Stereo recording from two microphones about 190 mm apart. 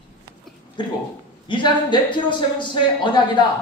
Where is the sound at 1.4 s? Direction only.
25° left (ahead or behind).